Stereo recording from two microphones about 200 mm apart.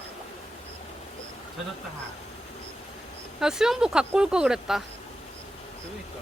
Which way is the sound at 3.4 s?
Centre (ahead or behind).